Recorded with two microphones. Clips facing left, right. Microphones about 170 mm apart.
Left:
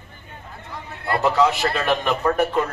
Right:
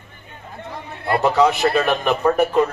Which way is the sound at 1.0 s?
20° right (ahead or behind).